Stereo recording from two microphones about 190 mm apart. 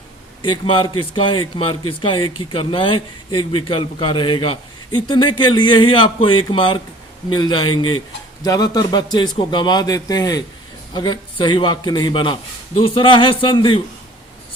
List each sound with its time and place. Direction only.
0.4 s a man's voice: 25° left (ahead or behind)